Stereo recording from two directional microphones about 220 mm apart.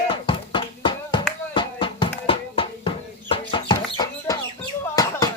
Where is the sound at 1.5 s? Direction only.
20° left (ahead or behind).